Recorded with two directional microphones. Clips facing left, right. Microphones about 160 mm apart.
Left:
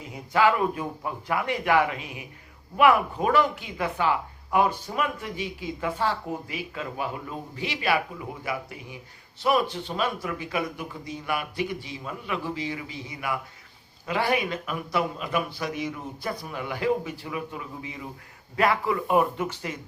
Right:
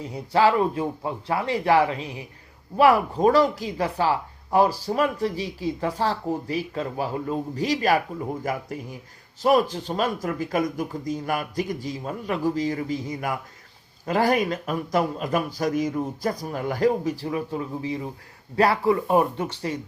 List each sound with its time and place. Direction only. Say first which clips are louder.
0.0 s speech: right 2 dB; 35° right (ahead or behind)